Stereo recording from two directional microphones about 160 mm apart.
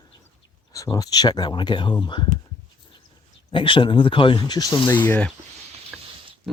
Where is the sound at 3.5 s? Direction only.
30° left (ahead or behind).